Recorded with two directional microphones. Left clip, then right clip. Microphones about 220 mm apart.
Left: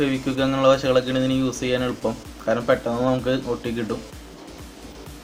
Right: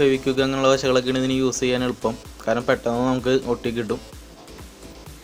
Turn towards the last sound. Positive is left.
turn(degrees=-40)  # may be behind; listen again after turning